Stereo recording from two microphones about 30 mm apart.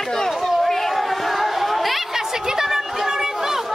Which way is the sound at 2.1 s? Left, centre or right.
Centre.